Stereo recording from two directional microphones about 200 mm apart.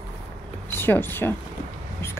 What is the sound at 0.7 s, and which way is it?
Speech, 10° left (ahead or behind).